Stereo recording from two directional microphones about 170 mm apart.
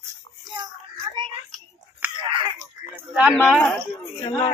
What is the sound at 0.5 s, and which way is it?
Child singing, 25° right (ahead or behind).